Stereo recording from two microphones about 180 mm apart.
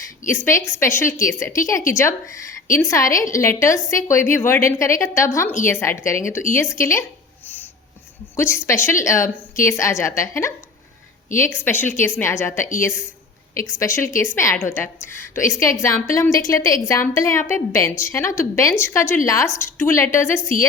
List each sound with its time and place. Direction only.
0.2 s a woman's voice: 45° left (ahead or behind)
0.8 s a woman's voice: 15° left (ahead or behind)
8.4 s a woman's voice: 15° left (ahead or behind)
13.7 s a woman's voice: 15° left (ahead or behind)